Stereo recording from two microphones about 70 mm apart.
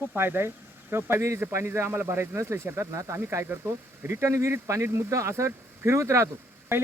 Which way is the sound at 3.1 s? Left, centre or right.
Right.